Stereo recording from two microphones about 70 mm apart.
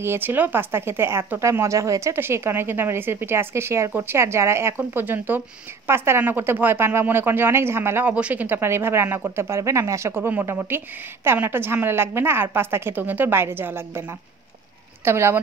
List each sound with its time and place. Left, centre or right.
0.0 s speech: right
2.1 s speech: right
8.1 s speech: centre
8.5 s speech: right